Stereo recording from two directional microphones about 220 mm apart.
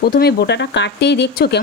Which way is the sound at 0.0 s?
45° left (ahead or behind).